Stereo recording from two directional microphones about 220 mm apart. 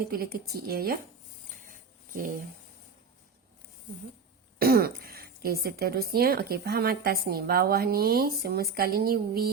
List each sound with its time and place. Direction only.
0.1 s speech: 40° right (ahead or behind)
1.5 s a sound: 40° right (ahead or behind)
4.6 s speech: 45° right (ahead or behind)